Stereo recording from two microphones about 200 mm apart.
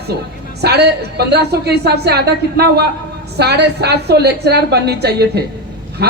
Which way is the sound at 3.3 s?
55° right (ahead or behind).